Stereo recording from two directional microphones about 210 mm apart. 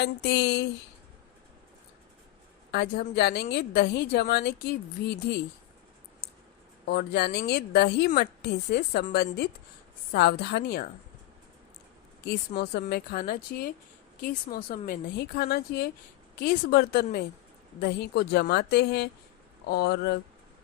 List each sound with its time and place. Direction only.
0.0 s a woman's voice: 55° left (ahead or behind)
2.7 s a woman's voice: 50° left (ahead or behind)
6.8 s a woman's voice: 50° left (ahead or behind)
12.3 s a woman's voice: 50° left (ahead or behind)